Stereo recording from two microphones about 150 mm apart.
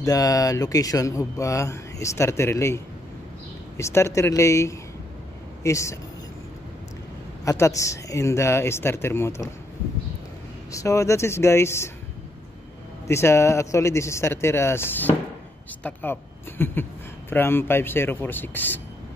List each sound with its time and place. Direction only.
0.0 s speech: 25° left (ahead or behind)
7.4 s speech: 20° left (ahead or behind)
10.7 s speech: 20° left (ahead or behind)
13.0 s a man's voice: 20° left (ahead or behind)